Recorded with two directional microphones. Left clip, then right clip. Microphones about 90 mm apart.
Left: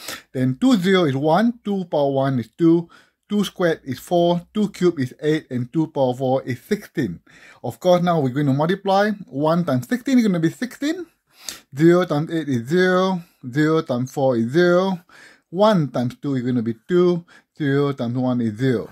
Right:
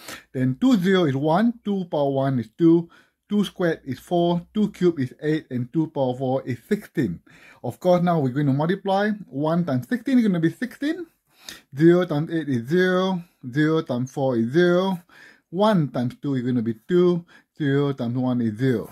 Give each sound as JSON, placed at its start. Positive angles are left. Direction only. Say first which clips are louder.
{"t": 0.0, "sound": "speech", "louder": "left 3 dB", "side_deg": 30}
{"t": 7.0, "sound": "speech", "louder": "left 1 dB", "side_deg": 0}
{"t": 7.6, "sound": "speech", "louder": "left 3 dB", "side_deg": 20}